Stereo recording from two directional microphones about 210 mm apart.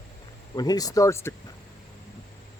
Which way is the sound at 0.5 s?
20° left (ahead or behind).